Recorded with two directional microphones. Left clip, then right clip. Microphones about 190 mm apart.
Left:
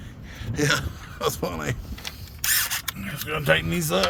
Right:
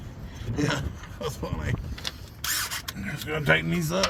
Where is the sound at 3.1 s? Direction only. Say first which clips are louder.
Left 1 dB; 60° left (ahead or behind).